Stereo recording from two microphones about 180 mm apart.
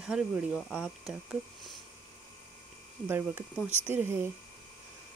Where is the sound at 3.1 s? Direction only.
15° right (ahead or behind).